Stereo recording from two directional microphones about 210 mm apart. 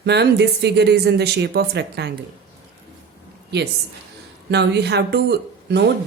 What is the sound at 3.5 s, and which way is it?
A woman's voice, 50° right (ahead or behind).